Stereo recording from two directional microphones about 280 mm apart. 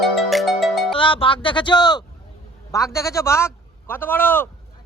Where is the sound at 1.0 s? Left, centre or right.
Centre.